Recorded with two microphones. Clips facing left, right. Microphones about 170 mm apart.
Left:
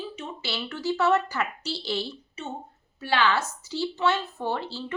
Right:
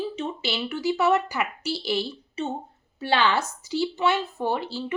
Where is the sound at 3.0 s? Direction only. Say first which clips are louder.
Right 2 dB; 25° right (ahead or behind).